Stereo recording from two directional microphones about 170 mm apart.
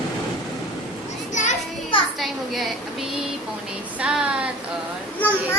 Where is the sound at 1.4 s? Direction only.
45° left (ahead or behind).